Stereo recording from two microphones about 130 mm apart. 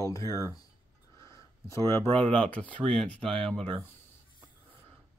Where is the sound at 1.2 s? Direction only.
25° left (ahead or behind).